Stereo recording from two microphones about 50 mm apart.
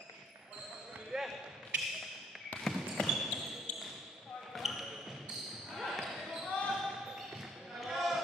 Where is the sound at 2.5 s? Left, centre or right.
Left.